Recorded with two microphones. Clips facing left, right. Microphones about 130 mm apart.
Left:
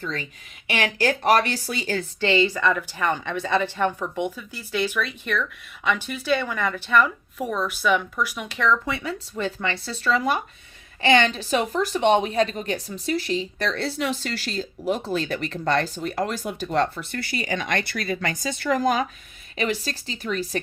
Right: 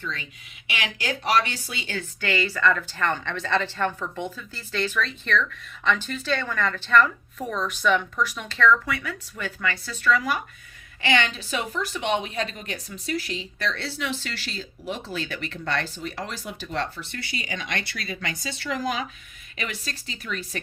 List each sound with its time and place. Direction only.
0.0 s a woman's voice: 40° left (ahead or behind)
2.2 s a woman's voice: 25° left (ahead or behind); by 19.0 s 45° left (ahead or behind)
19.5 s a woman's voice: 35° left (ahead or behind)